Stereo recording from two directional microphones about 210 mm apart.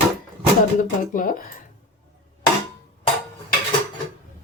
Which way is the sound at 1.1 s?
40° left (ahead or behind).